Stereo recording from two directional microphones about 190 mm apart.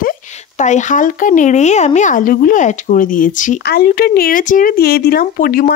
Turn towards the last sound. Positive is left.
turn(degrees=50)  # may be behind; listen again after turning